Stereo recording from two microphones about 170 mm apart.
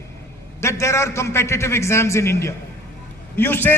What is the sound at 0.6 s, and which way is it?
A man's voice, 15° left (ahead or behind).